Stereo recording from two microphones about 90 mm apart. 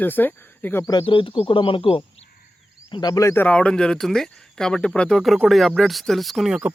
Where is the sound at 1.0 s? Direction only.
80° left.